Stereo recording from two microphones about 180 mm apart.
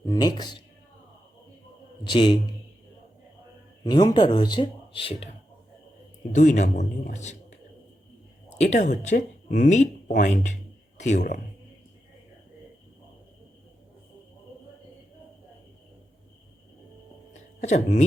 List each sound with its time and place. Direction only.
0.0 s speech: 20° left (ahead or behind)
2.0 s speech: 25° left (ahead or behind)
3.8 s speech: 25° left (ahead or behind)
6.3 s speech: 45° left (ahead or behind)
8.5 s a woman's voice: 40° left (ahead or behind)
17.6 s speech: 40° left (ahead or behind)